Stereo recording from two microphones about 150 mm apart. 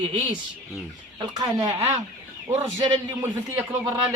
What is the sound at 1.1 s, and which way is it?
A man's voice, 25° right (ahead or behind).